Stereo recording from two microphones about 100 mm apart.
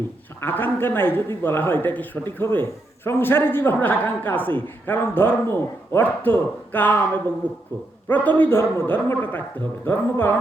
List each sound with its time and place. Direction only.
0.4 s a man's voice: 20° left (ahead or behind)